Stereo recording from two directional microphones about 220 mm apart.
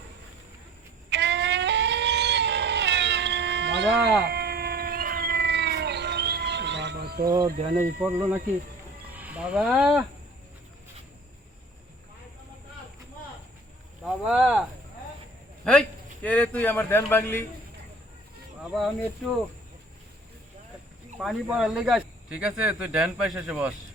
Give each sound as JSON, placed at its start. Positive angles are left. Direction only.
{"t": 1.1, "sound": "a sound", "side_deg": -50}
{"t": 4.2, "sound": "cat", "side_deg": -45}
{"t": 7.3, "sound": "speech", "side_deg": -15}
{"t": 14.0, "sound": "speech", "side_deg": 0}
{"t": 15.6, "sound": "a man's voice", "side_deg": 5}
{"t": 18.7, "sound": "speech", "side_deg": 0}
{"t": 21.2, "sound": "speech", "side_deg": 0}